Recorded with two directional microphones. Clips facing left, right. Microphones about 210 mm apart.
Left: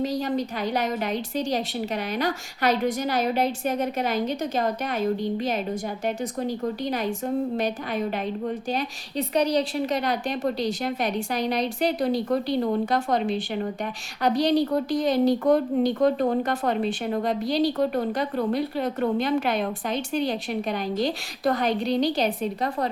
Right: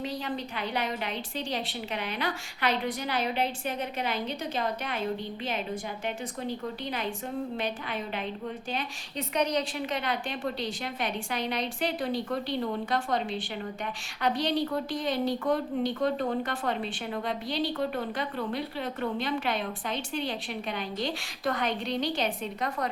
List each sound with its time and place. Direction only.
0.0 s speech: 40° left (ahead or behind)
8.7 s speech: 35° left (ahead or behind)